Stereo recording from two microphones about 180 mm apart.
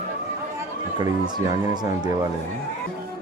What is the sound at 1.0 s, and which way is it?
Speech, 25° right (ahead or behind).